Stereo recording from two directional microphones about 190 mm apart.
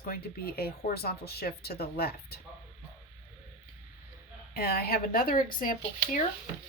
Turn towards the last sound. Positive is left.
turn(degrees=45)  # may be behind; listen again after turning